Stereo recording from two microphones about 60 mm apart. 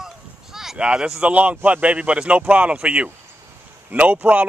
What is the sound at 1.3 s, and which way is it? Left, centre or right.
A man's voice, right.